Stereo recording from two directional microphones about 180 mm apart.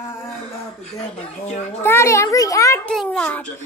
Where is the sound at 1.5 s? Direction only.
40° left (ahead or behind).